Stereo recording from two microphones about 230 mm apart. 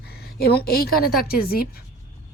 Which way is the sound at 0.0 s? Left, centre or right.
Left.